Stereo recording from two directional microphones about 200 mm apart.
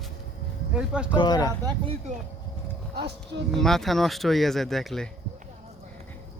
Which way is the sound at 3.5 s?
Centre (ahead or behind).